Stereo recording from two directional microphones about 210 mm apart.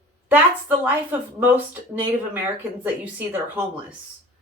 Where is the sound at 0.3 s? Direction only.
10° right (ahead or behind).